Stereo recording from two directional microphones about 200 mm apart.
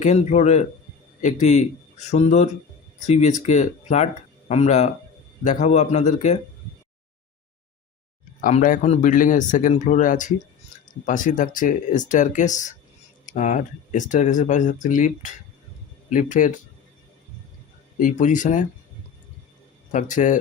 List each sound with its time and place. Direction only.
0.0 s speech: 35° left (ahead or behind)
8.4 s speech: 40° left (ahead or behind)
18.0 s speech: 40° left (ahead or behind)
19.9 s speech: 40° left (ahead or behind)